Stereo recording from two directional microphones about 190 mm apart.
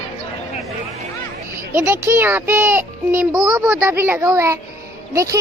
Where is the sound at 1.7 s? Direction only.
10° right (ahead or behind).